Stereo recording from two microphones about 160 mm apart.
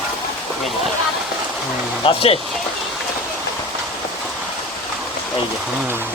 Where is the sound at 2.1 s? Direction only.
35° left (ahead or behind).